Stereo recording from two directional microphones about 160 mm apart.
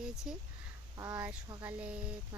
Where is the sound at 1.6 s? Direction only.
10° right (ahead or behind).